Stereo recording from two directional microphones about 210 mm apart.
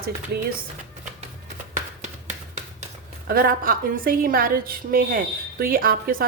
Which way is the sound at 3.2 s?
45° right (ahead or behind).